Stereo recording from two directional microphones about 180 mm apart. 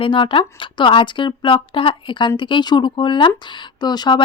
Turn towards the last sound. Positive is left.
turn(degrees=25)  # may be behind; listen again after turning